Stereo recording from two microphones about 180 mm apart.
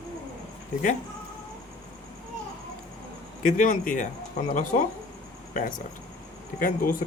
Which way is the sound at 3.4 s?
45° left (ahead or behind).